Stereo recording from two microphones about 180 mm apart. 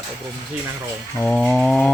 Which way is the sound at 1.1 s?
5° left (ahead or behind).